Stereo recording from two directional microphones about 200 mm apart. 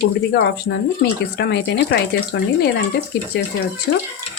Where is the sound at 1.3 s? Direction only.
55° left (ahead or behind).